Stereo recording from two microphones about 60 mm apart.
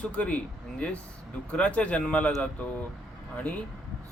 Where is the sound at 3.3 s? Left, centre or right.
Left.